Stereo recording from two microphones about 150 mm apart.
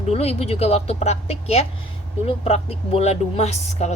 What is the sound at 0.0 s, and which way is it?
A woman's voice, 45° left (ahead or behind).